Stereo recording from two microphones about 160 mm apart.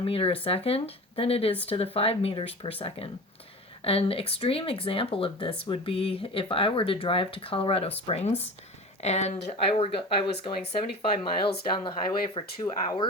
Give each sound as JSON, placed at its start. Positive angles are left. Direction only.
{"t": 0.0, "sound": "speech", "side_deg": 35}
{"t": 3.8, "sound": "speech", "side_deg": 35}
{"t": 12.6, "sound": "speech", "side_deg": 20}